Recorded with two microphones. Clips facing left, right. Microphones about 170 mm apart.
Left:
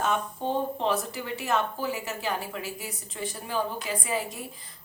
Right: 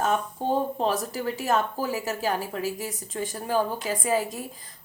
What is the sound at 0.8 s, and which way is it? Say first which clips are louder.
A woman's voice: right 2 dB; 40° right (ahead or behind).